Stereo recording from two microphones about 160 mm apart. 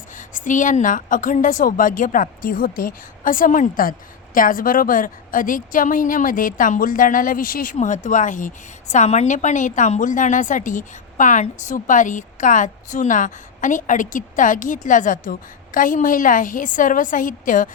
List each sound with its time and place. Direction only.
0.2 s a woman's voice: 55° left (ahead or behind)